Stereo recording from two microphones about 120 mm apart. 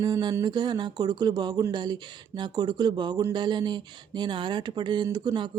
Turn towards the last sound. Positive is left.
turn(degrees=-40)  # may be behind; listen again after turning